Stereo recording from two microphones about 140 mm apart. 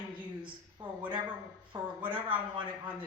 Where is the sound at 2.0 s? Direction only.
35° right (ahead or behind).